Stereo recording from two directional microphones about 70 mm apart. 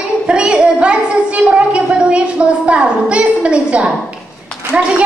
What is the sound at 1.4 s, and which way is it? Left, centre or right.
A woman's voice, centre.